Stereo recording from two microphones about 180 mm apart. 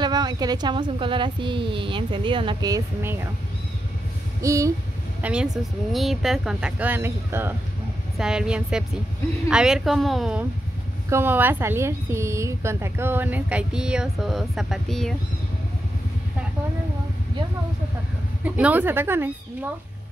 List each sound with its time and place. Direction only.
0.0 s a woman's voice: 20° right (ahead or behind)
4.4 s a woman's voice: 15° right (ahead or behind)
5.2 s a woman's voice: 5° right (ahead or behind)
11.1 s a woman's voice: 10° right (ahead or behind)
18.4 s a woman's voice: 10° right (ahead or behind)